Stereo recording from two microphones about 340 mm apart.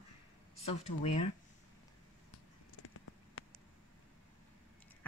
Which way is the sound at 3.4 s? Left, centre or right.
Left.